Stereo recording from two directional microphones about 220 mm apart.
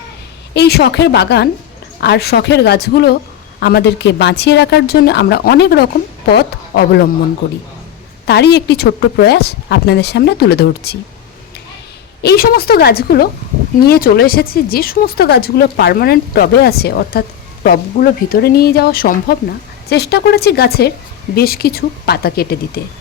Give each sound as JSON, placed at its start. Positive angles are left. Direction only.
{"t": 0.5, "sound": "speech", "side_deg": 50}
{"t": 8.3, "sound": "speech", "side_deg": 50}
{"t": 12.2, "sound": "speech", "side_deg": 45}